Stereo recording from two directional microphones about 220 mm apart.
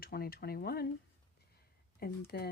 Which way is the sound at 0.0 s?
45° left (ahead or behind).